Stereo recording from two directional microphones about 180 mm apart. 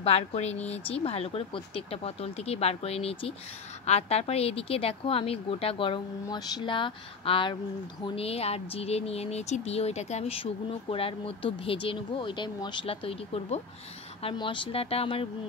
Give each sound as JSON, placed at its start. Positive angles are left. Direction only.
{"t": 0.0, "sound": "speech", "side_deg": 35}